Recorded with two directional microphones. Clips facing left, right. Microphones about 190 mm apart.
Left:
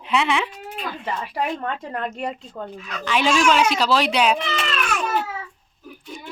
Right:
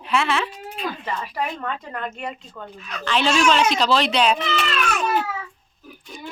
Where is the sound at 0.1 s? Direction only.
15° left (ahead or behind).